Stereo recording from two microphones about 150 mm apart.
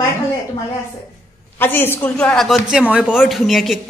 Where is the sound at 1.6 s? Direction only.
15° left (ahead or behind).